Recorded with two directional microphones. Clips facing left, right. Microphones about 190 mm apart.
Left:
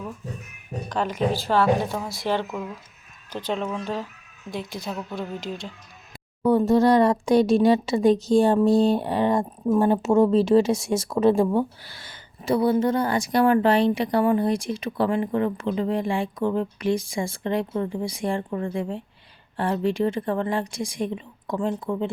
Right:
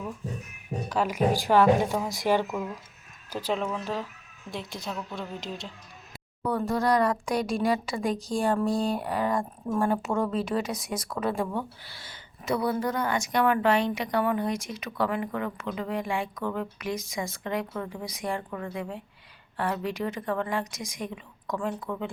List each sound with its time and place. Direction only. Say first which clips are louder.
0.9 s a woman's voice: left 1 dB; 10° right (ahead or behind)
6.4 s speech: left 9 dB; 25° left (ahead or behind)
11.9 s speech: left 2 dB; 50° left (ahead or behind)
12.5 s speech: left 7 dB; 30° left (ahead or behind)